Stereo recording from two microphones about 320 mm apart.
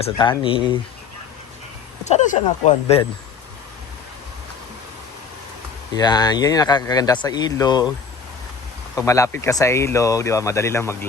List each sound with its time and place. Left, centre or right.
0.2 s speech: centre
2.0 s speech: left
6.0 s speech: centre
9.0 s speech: centre